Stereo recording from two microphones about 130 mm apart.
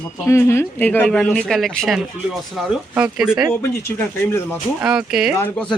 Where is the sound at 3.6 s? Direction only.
15° left (ahead or behind).